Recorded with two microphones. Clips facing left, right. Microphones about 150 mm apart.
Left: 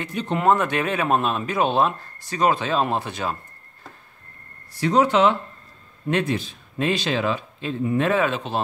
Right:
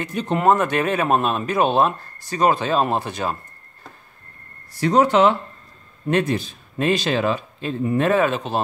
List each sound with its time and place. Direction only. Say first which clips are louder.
0.0 s speech: right 2 dB; 45° right (ahead or behind)
4.7 s speech: right 2 dB; 45° right (ahead or behind)